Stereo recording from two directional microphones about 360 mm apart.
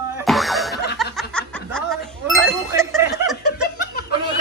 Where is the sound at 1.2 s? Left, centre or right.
Centre.